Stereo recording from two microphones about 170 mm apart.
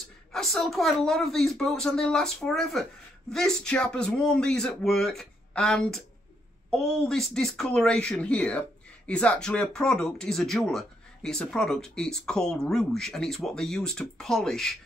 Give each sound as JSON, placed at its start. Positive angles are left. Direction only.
{"t": 0.3, "sound": "speech", "side_deg": 0}